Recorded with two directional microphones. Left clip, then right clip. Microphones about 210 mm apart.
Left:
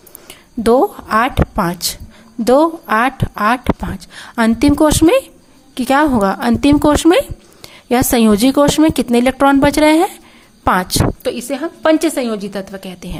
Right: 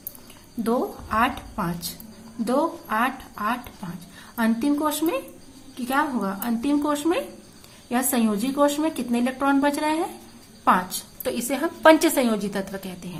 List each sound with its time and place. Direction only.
0.6 s speech: 45° left (ahead or behind)
11.2 s a woman's voice: 25° left (ahead or behind)